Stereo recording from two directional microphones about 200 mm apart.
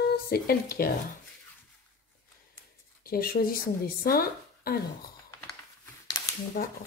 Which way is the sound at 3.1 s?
50° left (ahead or behind).